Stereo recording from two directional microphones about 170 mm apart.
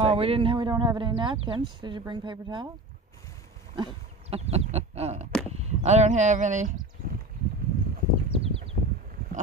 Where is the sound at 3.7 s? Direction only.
30° right (ahead or behind).